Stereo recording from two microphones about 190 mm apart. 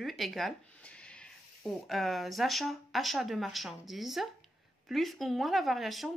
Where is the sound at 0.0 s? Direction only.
Centre (ahead or behind).